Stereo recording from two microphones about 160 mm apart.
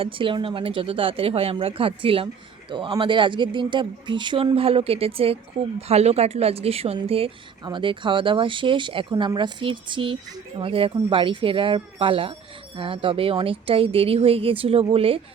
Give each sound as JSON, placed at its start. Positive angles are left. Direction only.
{"t": 0.0, "sound": "speech", "side_deg": -35}